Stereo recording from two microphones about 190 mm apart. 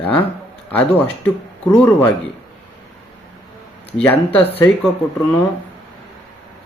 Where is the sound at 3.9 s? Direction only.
10° left (ahead or behind).